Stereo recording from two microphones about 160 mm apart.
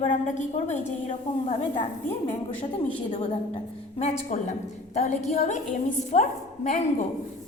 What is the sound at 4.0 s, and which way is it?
A woman's voice, 45° left (ahead or behind).